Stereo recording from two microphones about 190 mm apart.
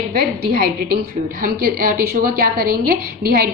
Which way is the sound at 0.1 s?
50° right (ahead or behind).